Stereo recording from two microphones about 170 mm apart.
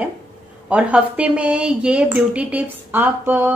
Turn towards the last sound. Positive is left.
turn(degrees=-10)  # may be behind; listen again after turning